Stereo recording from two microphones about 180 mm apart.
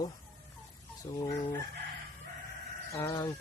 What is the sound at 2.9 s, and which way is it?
Speech, 15° left (ahead or behind).